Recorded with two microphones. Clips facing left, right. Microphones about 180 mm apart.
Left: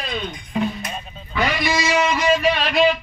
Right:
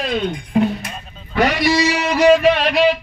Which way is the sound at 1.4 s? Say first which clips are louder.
Right 6 dB; 70° right (ahead or behind).